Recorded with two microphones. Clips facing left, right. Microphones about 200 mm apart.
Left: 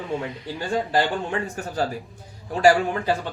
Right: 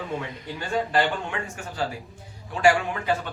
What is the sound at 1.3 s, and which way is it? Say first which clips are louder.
A man's voice: left 6 dB; 40° left (ahead or behind).